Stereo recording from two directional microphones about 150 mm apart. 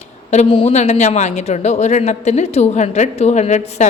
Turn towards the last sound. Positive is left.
turn(degrees=50)  # may be behind; listen again after turning